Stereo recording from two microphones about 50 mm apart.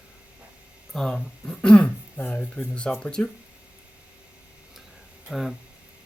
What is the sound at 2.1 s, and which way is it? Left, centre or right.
Speech, left.